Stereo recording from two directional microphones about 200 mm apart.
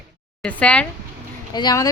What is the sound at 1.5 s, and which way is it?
Speech, 20° left (ahead or behind).